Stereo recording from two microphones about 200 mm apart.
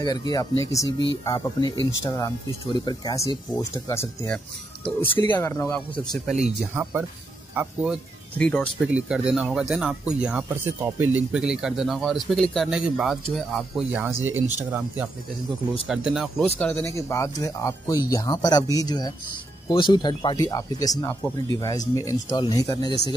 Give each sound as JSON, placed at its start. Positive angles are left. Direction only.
{"t": 0.0, "sound": "speech", "side_deg": 20}
{"t": 6.2, "sound": "speech", "side_deg": -5}
{"t": 8.8, "sound": "speech", "side_deg": -5}